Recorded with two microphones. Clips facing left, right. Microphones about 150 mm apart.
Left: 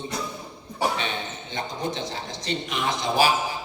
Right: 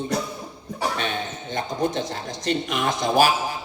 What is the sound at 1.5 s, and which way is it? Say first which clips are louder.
Speech: right 5 dB; 50° right (ahead or behind).